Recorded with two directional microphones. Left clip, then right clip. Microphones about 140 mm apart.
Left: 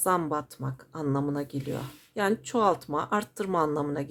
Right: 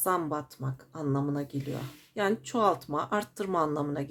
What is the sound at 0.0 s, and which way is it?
Speech, 30° left (ahead or behind).